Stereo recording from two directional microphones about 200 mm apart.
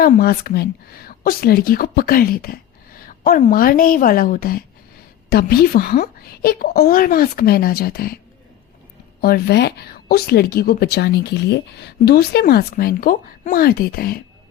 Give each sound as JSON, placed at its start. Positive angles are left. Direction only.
{"t": 0.0, "sound": "speech", "side_deg": 50}
{"t": 9.2, "sound": "speech", "side_deg": 55}